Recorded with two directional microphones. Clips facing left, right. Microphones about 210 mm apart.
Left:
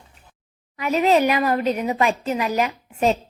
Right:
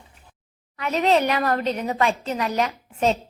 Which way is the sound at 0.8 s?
10° left (ahead or behind).